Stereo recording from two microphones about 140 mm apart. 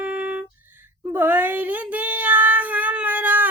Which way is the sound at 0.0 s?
10° right (ahead or behind).